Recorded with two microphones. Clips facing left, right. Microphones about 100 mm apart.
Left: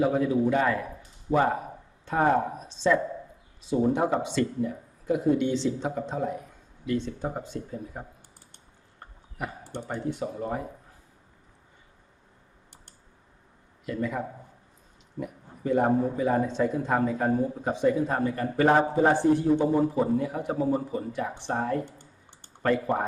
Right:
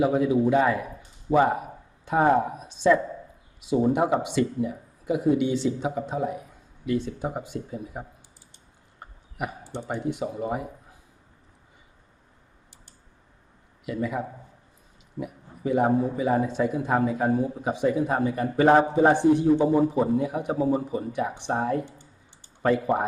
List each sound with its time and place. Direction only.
0.0 s speech: 10° right (ahead or behind)
9.4 s speech: 15° right (ahead or behind)
13.8 s speech: 10° right (ahead or behind)
21.8 s clicking: 55° left (ahead or behind)
22.6 s speech: 15° right (ahead or behind)